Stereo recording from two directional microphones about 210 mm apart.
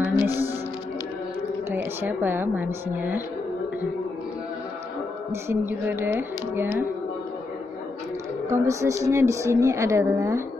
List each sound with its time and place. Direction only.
0.0 s music: 10° right (ahead or behind)
1.7 s a woman's voice: 10° right (ahead or behind)
5.3 s a woman's voice: 10° right (ahead or behind)
8.5 s a woman's voice: 15° right (ahead or behind)